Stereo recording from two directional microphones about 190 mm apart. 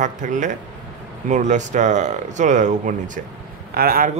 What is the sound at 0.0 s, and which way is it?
A man's voice, 40° right (ahead or behind).